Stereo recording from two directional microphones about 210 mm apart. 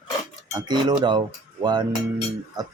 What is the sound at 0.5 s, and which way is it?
Speech, 20° right (ahead or behind).